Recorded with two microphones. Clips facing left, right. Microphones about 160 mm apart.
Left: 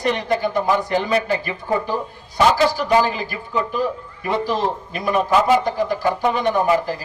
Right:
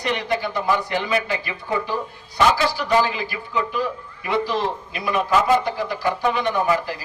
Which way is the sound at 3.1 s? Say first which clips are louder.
Left 2 dB; 45° left (ahead or behind).